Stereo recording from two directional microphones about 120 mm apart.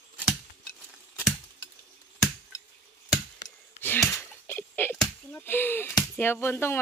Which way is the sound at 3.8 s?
15° left (ahead or behind).